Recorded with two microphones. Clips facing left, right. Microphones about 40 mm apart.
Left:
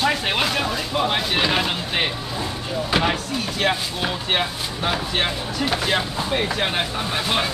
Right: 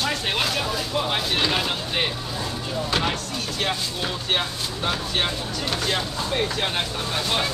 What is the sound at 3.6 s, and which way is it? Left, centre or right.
Speech, centre.